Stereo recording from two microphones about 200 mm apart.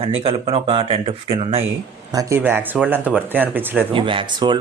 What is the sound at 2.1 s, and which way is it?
Speech, 15° right (ahead or behind).